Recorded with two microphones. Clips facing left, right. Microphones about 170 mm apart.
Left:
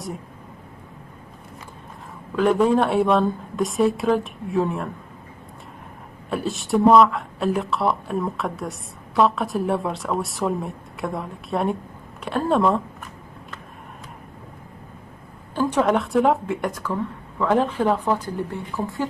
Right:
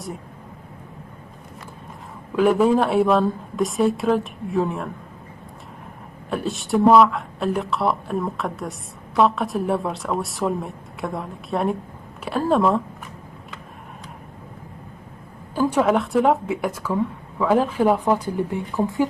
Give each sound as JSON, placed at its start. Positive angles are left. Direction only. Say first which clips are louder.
{"t": 2.3, "sound": "speech", "louder": "right 1 dB", "side_deg": -5}
{"t": 6.3, "sound": "speech", "louder": "even", "side_deg": 0}
{"t": 15.5, "sound": "a woman's voice", "louder": "right 1 dB", "side_deg": -5}